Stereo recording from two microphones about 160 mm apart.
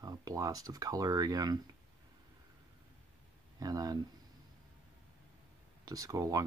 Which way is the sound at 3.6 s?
25° right (ahead or behind).